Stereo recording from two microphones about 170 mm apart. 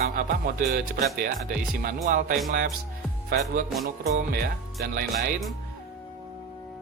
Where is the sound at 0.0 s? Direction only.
60° right (ahead or behind).